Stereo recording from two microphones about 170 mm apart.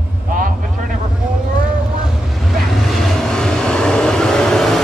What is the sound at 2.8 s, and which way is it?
Vehicle, centre (ahead or behind).